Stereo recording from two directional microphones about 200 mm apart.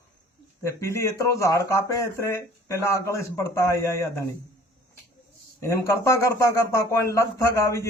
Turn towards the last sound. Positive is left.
turn(degrees=15)  # may be behind; listen again after turning